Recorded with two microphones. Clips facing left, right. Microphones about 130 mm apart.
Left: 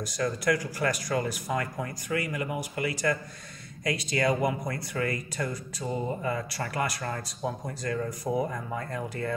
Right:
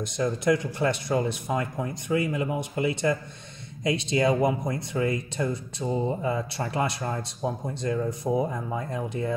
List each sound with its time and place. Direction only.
0.0 s speech: 25° right (ahead or behind)